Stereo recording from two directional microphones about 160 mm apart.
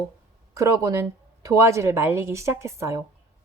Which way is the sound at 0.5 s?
20° right (ahead or behind).